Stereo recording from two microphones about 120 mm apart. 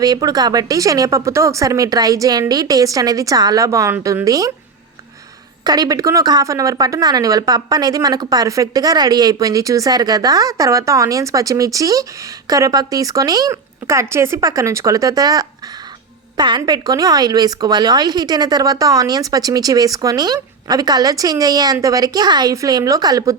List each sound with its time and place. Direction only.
0.0 s speech: 35° right (ahead or behind)
5.6 s speech: 30° right (ahead or behind)